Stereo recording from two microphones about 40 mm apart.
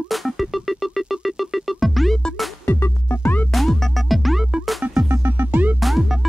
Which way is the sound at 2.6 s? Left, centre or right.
Left.